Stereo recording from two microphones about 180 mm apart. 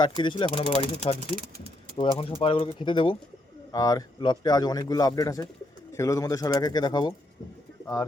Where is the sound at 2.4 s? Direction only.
30° left (ahead or behind).